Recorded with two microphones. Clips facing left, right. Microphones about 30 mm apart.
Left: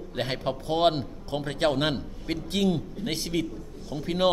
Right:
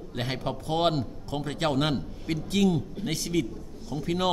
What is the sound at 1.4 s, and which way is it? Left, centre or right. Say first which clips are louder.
Speech: left 2 dB; centre.